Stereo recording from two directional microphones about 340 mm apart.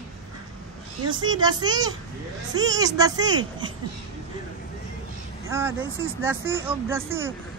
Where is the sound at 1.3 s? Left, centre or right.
Centre.